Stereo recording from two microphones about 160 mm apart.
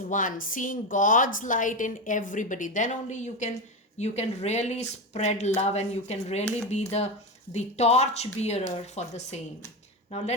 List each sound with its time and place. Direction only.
0.1 s a woman's voice: 55° left (ahead or behind)